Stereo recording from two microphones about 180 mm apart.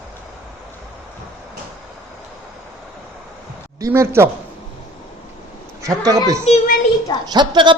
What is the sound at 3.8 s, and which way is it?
Speech, 15° right (ahead or behind).